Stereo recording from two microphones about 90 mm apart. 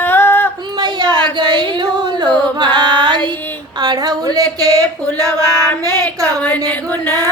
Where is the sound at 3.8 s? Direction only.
50° right (ahead or behind).